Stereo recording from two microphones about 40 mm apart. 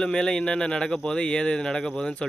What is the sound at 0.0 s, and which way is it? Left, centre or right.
Speech, centre.